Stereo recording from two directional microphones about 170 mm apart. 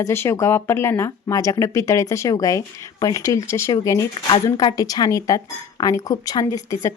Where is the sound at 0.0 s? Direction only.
15° left (ahead or behind).